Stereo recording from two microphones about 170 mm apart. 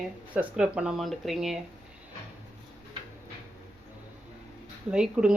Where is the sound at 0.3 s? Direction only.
5° right (ahead or behind).